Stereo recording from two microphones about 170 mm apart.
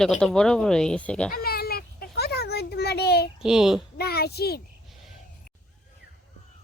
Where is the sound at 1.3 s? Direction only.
65° left (ahead or behind).